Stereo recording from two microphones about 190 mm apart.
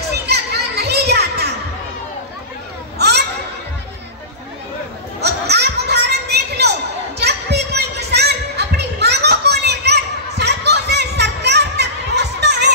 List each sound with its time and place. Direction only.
0.3 s children playing: 60° right (ahead or behind)
3.0 s children playing: 60° right (ahead or behind)
5.2 s a sound: 60° right (ahead or behind)